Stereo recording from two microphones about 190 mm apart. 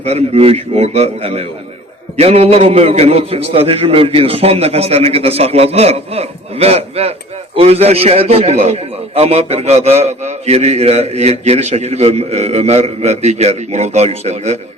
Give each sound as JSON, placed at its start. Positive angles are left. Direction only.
{"t": 0.0, "sound": "a man's voice", "side_deg": -35}